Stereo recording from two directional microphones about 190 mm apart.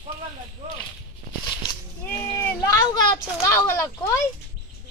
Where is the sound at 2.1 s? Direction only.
15° left (ahead or behind).